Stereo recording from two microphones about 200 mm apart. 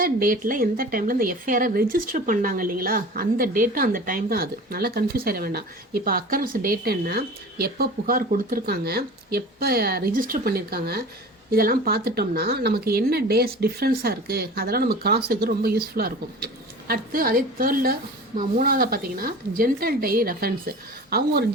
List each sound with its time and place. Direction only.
0.0 s speech: 45° right (ahead or behind)